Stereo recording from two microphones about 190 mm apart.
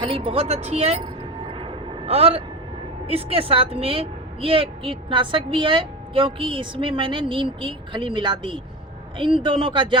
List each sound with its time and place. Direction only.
0.0 s speech: 30° right (ahead or behind)
1.5 s vehicle: 30° right (ahead or behind)
3.1 s a woman's voice: 30° right (ahead or behind)